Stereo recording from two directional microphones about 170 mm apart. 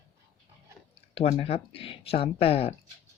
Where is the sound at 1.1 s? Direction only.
35° left (ahead or behind).